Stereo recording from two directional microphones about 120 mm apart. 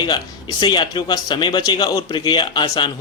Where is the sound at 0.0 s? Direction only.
40° left (ahead or behind).